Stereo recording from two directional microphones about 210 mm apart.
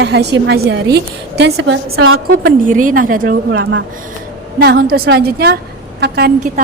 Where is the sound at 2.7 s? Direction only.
40° right (ahead or behind).